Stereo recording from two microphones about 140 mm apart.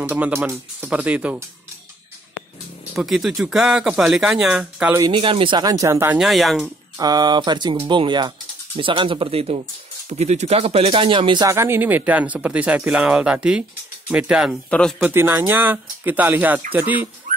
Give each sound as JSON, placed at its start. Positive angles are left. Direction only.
{"t": 0.0, "sound": "speech", "side_deg": -15}
{"t": 2.9, "sound": "speech", "side_deg": -5}
{"t": 5.1, "sound": "speech", "side_deg": -35}
{"t": 6.1, "sound": "speech", "side_deg": 0}
{"t": 7.0, "sound": "speech", "side_deg": -30}
{"t": 11.4, "sound": "speech", "side_deg": -20}
{"t": 14.7, "sound": "speech", "side_deg": 5}
{"t": 15.0, "sound": "speech", "side_deg": -15}